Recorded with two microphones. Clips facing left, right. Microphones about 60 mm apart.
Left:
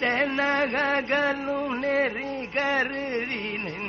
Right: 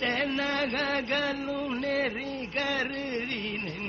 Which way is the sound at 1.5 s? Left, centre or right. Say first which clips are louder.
Left 4 dB; left.